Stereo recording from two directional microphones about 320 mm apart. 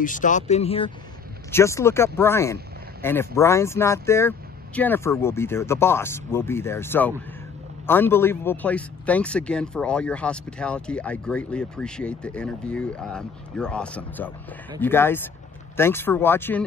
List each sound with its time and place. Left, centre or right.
0.0 s a man's voice: left; by 16.6 s centre